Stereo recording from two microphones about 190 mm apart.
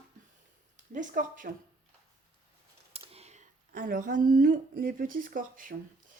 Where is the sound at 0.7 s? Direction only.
40° right (ahead or behind).